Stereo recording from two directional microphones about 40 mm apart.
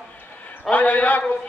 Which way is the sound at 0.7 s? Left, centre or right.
Left.